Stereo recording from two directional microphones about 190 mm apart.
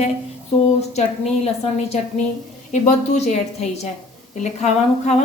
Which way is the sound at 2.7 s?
35° left (ahead or behind).